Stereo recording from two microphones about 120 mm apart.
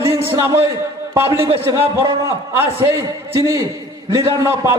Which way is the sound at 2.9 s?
25° right (ahead or behind).